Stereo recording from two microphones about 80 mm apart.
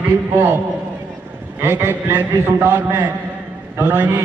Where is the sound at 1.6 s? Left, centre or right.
Right.